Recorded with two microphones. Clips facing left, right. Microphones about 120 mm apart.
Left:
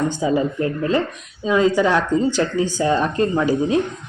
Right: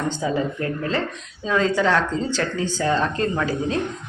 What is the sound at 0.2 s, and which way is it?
Speech, 15° left (ahead or behind).